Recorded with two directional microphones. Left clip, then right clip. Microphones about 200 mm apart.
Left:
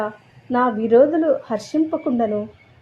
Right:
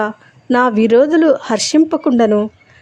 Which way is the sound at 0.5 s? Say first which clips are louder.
Right 5 dB; 40° right (ahead or behind).